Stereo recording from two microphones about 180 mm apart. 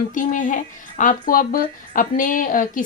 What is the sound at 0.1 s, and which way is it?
Speech, 45° left (ahead or behind).